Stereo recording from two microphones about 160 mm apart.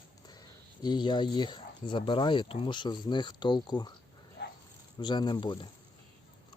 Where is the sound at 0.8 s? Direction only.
30° left (ahead or behind).